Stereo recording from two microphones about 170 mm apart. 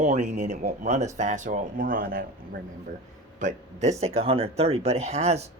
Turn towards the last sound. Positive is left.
turn(degrees=-40)  # may be behind; listen again after turning